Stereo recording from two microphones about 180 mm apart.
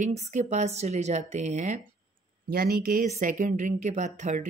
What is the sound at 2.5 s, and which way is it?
Speech, 55° right (ahead or behind).